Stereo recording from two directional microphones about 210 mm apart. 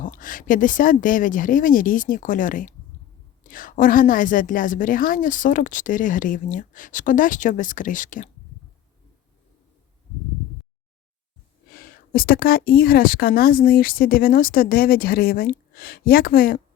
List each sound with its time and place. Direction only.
0.0 s a woman's voice: 40° left (ahead or behind)
11.7 s a woman's voice: 45° left (ahead or behind)